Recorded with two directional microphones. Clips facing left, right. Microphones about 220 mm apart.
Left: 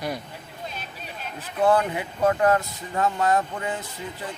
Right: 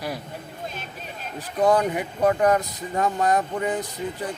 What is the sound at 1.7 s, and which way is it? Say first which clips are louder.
Speech: right 1 dB; 15° right (ahead or behind).